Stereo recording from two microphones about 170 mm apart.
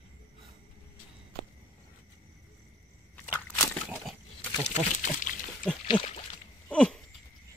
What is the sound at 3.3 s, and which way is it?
Slosh, 15° left (ahead or behind).